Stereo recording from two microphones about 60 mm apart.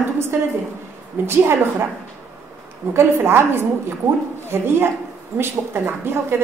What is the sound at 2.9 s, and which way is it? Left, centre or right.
A woman's voice, right.